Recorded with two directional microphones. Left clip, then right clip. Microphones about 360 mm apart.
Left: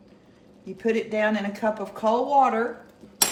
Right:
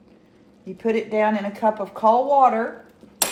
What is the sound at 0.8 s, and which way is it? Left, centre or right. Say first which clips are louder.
Speech: right 3 dB; centre.